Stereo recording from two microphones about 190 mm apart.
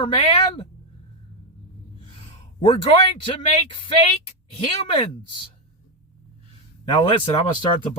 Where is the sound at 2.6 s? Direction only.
25° left (ahead or behind).